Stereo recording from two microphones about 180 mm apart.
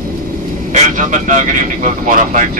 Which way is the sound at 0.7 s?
45° right (ahead or behind).